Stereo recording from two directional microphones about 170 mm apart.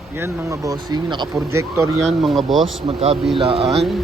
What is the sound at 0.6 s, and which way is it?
Speech, 25° right (ahead or behind).